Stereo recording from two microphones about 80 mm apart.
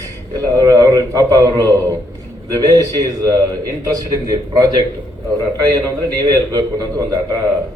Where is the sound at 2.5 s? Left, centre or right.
Right.